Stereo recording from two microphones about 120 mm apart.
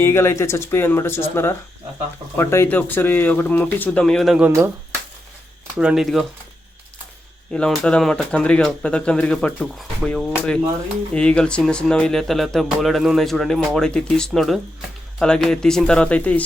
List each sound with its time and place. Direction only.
0.0 s speech: 25° left (ahead or behind); by 4.4 s centre (ahead or behind)
4.4 s speech: 20° right (ahead or behind)
5.8 s speech: 5° right (ahead or behind)
7.5 s speech: 5° left (ahead or behind)